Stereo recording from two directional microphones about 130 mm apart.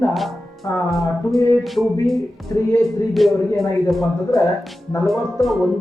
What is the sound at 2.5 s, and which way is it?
Speech, 25° left (ahead or behind).